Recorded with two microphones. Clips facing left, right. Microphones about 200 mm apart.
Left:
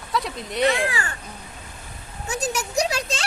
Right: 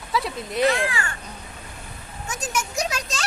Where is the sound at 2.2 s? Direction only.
35° left (ahead or behind).